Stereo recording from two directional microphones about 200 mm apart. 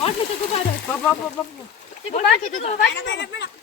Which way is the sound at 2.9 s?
65° left (ahead or behind).